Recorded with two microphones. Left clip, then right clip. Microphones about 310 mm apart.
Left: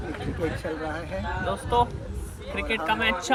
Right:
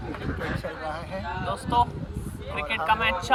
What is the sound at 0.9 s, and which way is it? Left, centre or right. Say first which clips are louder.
Speech: left 1 dB; centre.